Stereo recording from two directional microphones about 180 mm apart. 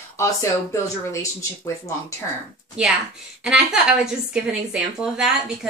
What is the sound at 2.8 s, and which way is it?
A woman's voice, 5° right (ahead or behind).